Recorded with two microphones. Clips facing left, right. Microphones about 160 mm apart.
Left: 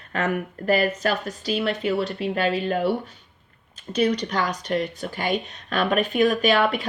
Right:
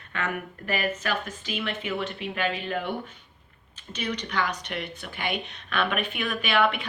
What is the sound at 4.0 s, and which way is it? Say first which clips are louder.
Speech: left 7 dB; 40° left (ahead or behind).